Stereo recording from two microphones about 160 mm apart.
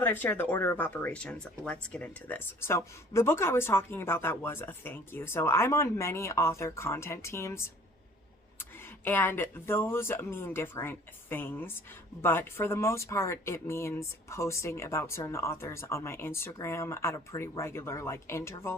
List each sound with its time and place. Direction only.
0.0 s speech: 15° left (ahead or behind)
9.0 s speech: 15° left (ahead or behind)